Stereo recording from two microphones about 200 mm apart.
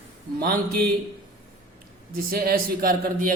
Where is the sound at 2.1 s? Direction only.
50° right (ahead or behind).